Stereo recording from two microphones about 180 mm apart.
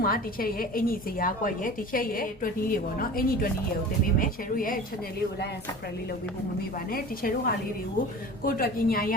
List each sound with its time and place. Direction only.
0.0 s a woman's voice: 55° left (ahead or behind)
6.9 s a woman's voice: 55° left (ahead or behind)